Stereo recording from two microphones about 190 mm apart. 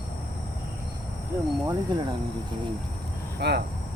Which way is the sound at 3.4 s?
60° right (ahead or behind).